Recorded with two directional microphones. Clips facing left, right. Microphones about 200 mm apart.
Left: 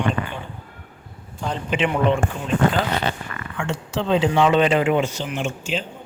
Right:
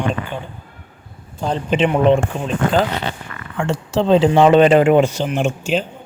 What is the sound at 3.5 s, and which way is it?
Speech, 35° right (ahead or behind).